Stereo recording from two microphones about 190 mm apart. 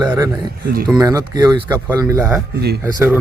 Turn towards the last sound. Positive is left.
turn(degrees=-10)  # may be behind; listen again after turning